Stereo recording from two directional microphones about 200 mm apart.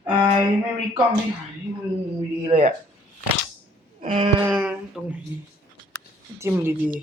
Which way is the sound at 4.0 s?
30° right (ahead or behind).